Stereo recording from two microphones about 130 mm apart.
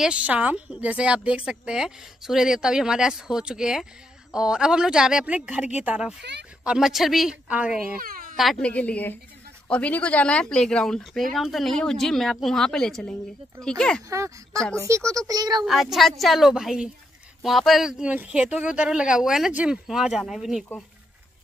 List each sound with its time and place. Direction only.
0.0 s a woman's voice: 10° right (ahead or behind)
8.0 s a sound: 90° right
8.4 s a woman's voice: 5° left (ahead or behind)
14.0 s speech: 25° right (ahead or behind)
15.6 s a woman's voice: centre (ahead or behind)